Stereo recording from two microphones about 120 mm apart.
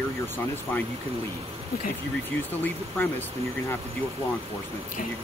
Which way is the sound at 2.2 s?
15° left (ahead or behind).